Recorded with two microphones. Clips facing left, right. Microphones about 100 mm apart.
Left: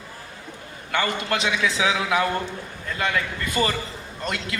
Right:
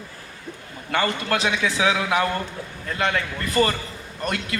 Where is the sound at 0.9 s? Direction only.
30° right (ahead or behind).